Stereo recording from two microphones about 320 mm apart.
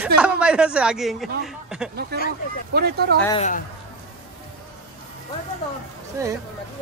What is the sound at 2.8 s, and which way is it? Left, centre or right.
Speech, right.